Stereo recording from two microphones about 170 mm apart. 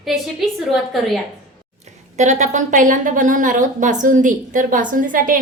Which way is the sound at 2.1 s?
45° right (ahead or behind).